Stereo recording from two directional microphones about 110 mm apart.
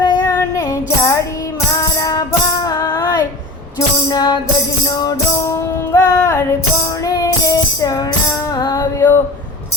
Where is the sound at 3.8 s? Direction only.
40° left (ahead or behind).